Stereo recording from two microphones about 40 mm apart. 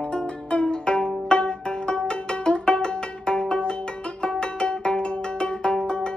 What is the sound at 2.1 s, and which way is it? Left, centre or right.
Music, left.